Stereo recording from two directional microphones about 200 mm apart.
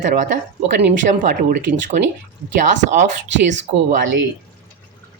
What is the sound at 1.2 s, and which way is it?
Speech, 45° right (ahead or behind).